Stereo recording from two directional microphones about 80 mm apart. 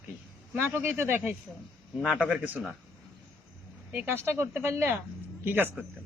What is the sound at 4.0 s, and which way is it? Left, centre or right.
Speech, right.